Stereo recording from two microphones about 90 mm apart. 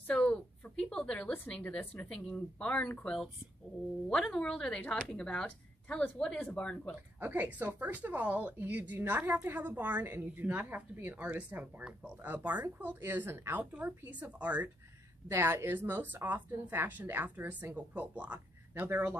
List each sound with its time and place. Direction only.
0.0 s a sound: 10° left (ahead or behind)
2.0 s speech: 10° left (ahead or behind)
4.1 s speech: 10° left (ahead or behind)
7.2 s speech: 20° right (ahead or behind)
15.2 s speech: 30° right (ahead or behind)
18.9 s speech: 25° right (ahead or behind)